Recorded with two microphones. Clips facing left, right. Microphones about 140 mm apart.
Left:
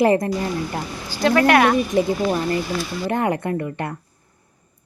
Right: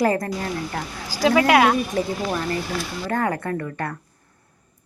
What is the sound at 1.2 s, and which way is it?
Speech, 5° right (ahead or behind).